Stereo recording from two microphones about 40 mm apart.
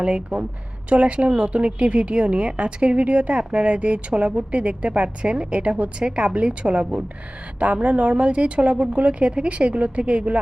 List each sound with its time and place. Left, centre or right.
0.0 s a woman's voice: right